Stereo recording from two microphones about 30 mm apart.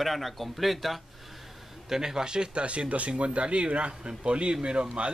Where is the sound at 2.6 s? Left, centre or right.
Right.